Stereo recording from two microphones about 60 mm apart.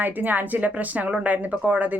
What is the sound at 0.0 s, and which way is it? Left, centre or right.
Speech, right.